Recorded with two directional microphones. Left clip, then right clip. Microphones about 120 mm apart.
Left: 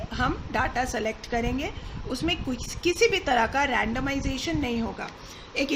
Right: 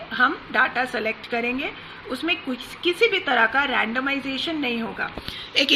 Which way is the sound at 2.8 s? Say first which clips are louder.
Right 2 dB; 25° left (ahead or behind).